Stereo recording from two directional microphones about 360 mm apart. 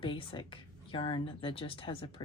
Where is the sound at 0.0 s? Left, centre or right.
Centre.